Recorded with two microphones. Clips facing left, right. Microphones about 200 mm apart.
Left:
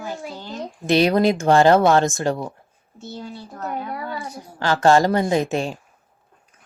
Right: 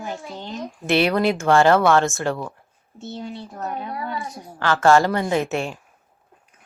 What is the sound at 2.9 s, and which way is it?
A woman's voice, 25° right (ahead or behind).